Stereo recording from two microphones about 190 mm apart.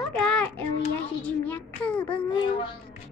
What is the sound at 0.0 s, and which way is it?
Child singing, 5° left (ahead or behind).